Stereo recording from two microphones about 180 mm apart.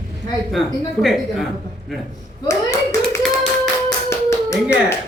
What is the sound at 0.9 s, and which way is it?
A man's voice, centre (ahead or behind).